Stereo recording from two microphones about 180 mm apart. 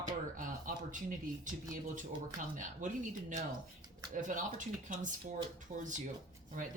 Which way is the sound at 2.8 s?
45° right (ahead or behind).